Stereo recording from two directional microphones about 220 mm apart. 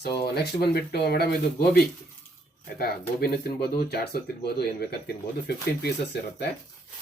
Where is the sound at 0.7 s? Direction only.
45° left (ahead or behind).